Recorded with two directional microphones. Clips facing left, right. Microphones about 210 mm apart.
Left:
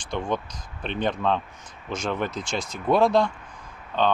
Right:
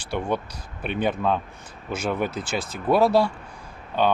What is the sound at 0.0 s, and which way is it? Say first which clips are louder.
Speech: right 2 dB; 10° right (ahead or behind).